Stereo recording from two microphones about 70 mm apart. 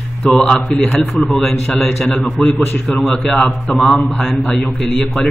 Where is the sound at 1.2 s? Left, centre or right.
Centre.